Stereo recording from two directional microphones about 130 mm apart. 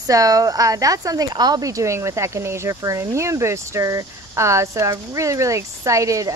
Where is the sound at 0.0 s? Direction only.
25° right (ahead or behind).